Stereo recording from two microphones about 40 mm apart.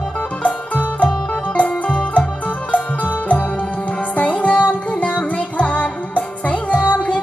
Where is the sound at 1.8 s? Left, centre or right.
Left.